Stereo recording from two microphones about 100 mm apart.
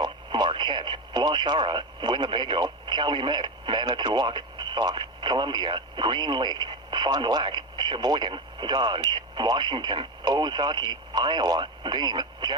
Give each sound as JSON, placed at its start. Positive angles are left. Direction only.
{"t": 0.0, "sound": "speech", "side_deg": -50}